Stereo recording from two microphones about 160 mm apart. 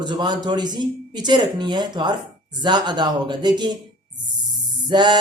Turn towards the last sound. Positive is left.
turn(degrees=-30)  # may be behind; listen again after turning